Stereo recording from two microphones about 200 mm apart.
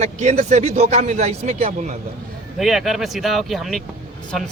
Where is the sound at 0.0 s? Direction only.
35° right (ahead or behind).